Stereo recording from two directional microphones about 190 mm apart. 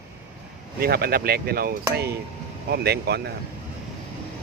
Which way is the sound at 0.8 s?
55° right (ahead or behind).